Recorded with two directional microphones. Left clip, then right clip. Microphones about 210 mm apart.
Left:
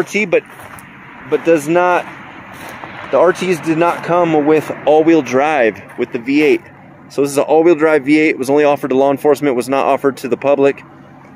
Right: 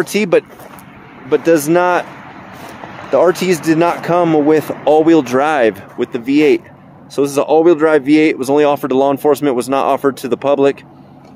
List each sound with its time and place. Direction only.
0.0 s speech: 25° right (ahead or behind)
3.1 s speech: 20° right (ahead or behind); by 10.8 s centre (ahead or behind)